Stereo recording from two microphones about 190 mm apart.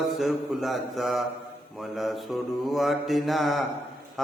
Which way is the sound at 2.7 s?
Centre (ahead or behind).